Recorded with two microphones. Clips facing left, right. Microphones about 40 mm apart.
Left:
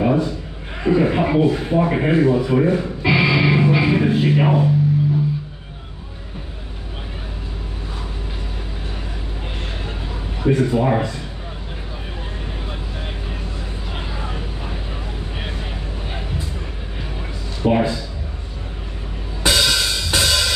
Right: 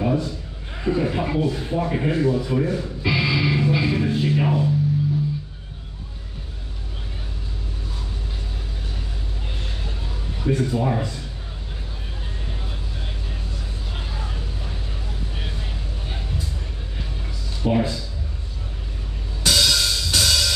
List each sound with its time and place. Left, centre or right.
0.0 s a sound: left
10.4 s speech: left
13.9 s vehicle: left
17.6 s speech: left
19.4 s music: left